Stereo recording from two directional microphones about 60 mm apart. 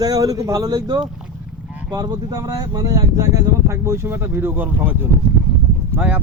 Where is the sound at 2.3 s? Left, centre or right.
Right.